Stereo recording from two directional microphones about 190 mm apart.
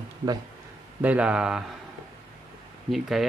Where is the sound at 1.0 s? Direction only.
5° right (ahead or behind).